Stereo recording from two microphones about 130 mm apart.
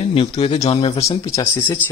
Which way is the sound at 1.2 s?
25° left (ahead or behind).